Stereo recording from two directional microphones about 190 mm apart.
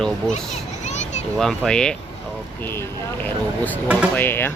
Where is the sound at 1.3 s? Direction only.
Centre (ahead or behind).